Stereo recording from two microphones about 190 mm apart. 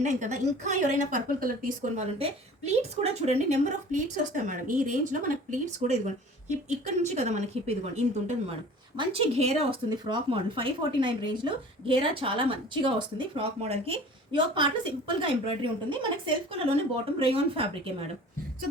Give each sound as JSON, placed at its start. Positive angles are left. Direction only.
{"t": 0.0, "sound": "speech", "side_deg": -40}